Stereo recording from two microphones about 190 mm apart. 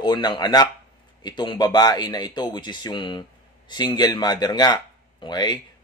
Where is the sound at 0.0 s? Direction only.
25° left (ahead or behind).